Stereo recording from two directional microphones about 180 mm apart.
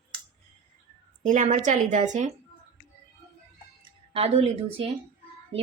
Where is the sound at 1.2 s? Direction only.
45° right (ahead or behind).